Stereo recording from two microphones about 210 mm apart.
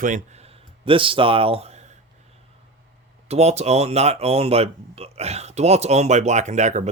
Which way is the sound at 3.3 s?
30° right (ahead or behind).